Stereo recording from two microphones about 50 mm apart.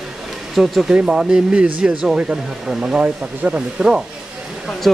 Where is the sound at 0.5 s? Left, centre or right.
Centre.